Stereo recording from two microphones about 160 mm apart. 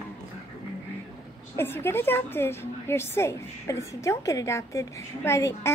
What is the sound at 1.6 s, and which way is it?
A woman's voice, 15° left (ahead or behind).